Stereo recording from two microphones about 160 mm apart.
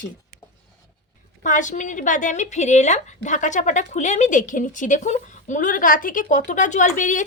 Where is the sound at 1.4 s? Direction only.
50° left (ahead or behind).